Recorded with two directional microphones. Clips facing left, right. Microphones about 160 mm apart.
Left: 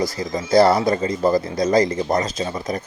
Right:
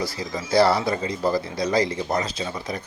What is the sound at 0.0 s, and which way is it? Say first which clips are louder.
Speech: left 5 dB; 45° left (ahead or behind).